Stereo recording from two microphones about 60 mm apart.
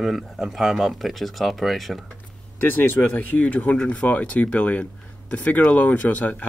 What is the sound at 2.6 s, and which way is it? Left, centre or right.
Speech, left.